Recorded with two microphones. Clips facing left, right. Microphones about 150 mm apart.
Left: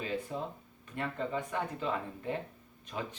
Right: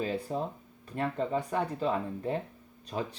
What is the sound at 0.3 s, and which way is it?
Speech, 35° right (ahead or behind).